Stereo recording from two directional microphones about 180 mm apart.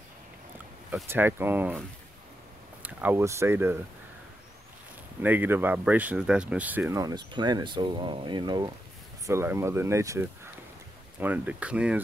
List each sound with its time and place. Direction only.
1.0 s speech: 10° right (ahead or behind)
5.2 s speech: 10° right (ahead or behind)